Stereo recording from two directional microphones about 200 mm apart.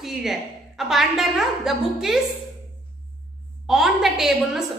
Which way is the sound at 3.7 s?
Centre (ahead or behind).